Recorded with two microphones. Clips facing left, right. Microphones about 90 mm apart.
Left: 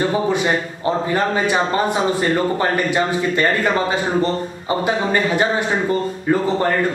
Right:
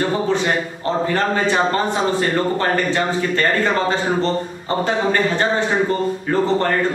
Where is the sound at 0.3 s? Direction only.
15° left (ahead or behind).